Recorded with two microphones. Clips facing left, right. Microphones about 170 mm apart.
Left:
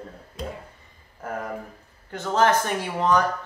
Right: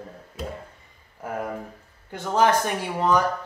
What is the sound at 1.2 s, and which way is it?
Speech, 10° right (ahead or behind).